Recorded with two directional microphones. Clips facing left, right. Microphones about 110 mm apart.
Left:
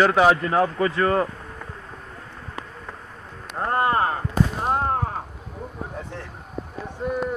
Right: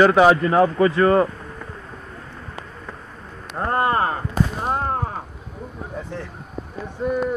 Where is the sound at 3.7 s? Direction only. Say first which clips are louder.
Right 1 dB; 45° right (ahead or behind).